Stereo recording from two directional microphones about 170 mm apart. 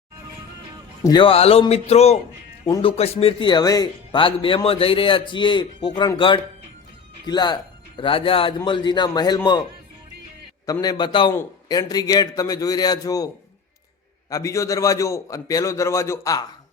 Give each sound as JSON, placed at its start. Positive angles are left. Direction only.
{"t": 1.0, "sound": "speech", "side_deg": 30}
{"t": 10.7, "sound": "speech", "side_deg": 25}